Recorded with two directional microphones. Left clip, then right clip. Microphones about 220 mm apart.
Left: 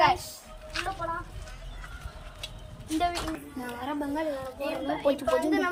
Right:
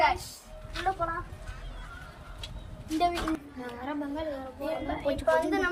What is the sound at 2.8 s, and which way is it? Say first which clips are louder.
Speech: right 1 dB; 15° left (ahead or behind).